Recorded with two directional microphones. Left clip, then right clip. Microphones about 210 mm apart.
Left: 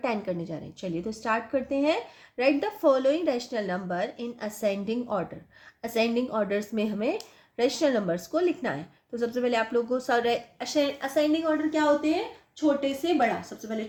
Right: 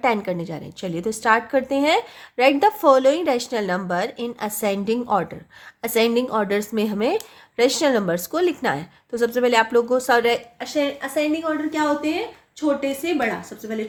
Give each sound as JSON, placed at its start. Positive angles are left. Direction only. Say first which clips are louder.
{"t": 0.0, "sound": "a woman's voice", "louder": "right 8 dB", "side_deg": -30}
{"t": 10.6, "sound": "a woman's voice", "louder": "right 3 dB", "side_deg": -5}
{"t": 11.7, "sound": "a woman's voice", "louder": "right 2 dB", "side_deg": -25}